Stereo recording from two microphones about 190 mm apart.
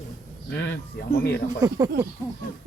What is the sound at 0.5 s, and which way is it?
Speech, 65° left (ahead or behind).